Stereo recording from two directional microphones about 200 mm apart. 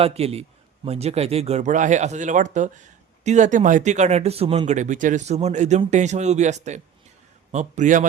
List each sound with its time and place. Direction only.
0.0 s speech: 30° right (ahead or behind)